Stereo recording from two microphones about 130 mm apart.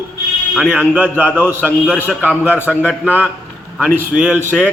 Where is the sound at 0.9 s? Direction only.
15° right (ahead or behind).